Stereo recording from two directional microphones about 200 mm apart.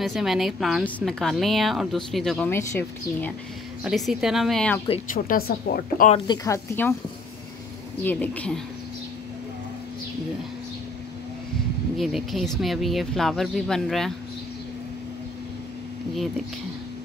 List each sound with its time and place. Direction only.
0.0 s a woman's voice: centre (ahead or behind)
3.8 s a woman's voice: centre (ahead or behind)
5.1 s speech: 45° left (ahead or behind)
6.1 s speech: 20° left (ahead or behind)
8.0 s speech: 10° left (ahead or behind)
12.0 s a woman's voice: centre (ahead or behind)